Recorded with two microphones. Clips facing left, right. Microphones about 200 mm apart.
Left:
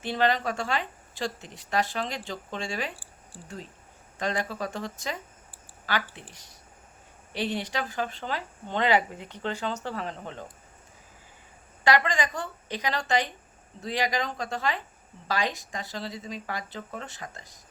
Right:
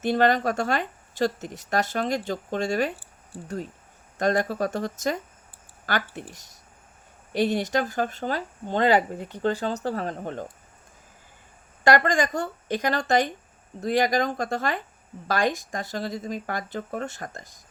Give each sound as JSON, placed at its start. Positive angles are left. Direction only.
{"t": 0.0, "sound": "speech", "side_deg": -45}
{"t": 2.9, "sound": "a sound", "side_deg": -20}
{"t": 4.2, "sound": "speech", "side_deg": -45}
{"t": 7.3, "sound": "speech", "side_deg": -45}
{"t": 11.8, "sound": "speech", "side_deg": -45}